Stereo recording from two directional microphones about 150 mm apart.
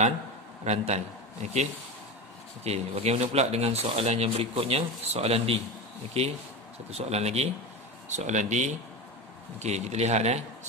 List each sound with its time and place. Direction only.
0.7 s a man's voice: 50° right (ahead or behind)